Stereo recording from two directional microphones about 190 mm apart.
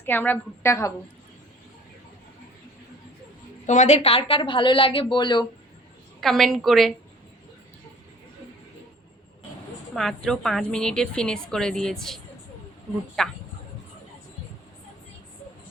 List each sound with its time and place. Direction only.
0.0 s a woman's voice: 10° left (ahead or behind)
3.7 s a woman's voice: 40° left (ahead or behind)
6.1 s a woman's voice: centre (ahead or behind)
9.9 s a woman's voice: centre (ahead or behind)